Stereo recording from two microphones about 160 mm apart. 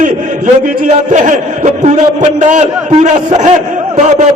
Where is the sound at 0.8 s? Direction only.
50° right (ahead or behind).